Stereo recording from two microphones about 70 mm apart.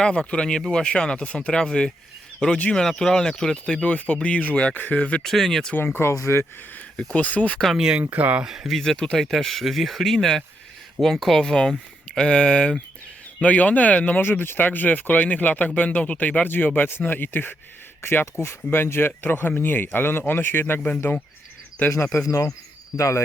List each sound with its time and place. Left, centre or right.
0.0 s speech: centre
5.2 s speech: centre
5.7 s speech: left
6.9 s speech: centre
7.8 s speech: centre
8.4 s speech: centre
14.2 s speech: left
22.3 s speech: left